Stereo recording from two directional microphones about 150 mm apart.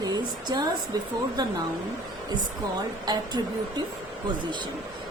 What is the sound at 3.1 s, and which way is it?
Speech, 25° right (ahead or behind).